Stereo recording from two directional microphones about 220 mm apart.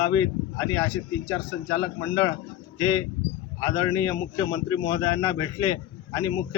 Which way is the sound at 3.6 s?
15° left (ahead or behind).